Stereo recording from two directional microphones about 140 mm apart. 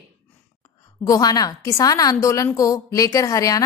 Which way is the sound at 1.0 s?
25° left (ahead or behind).